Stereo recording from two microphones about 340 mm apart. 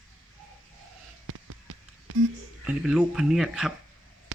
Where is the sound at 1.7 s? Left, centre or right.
Right.